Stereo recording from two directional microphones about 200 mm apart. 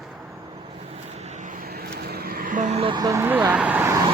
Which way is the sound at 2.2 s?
45° right (ahead or behind).